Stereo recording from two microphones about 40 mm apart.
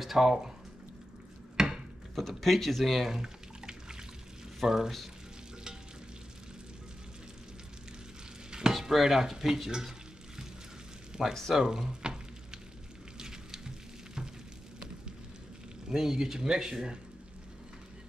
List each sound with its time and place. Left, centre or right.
0.0 s speech: centre
1.6 s wood: centre
2.1 s speech: centre
3.1 s drip: centre
4.6 s speech: centre
8.5 s dishes: centre
8.7 s speech: centre
11.2 s speech: centre
11.5 s frying: centre
13.2 s a sound: centre
15.9 s speech: centre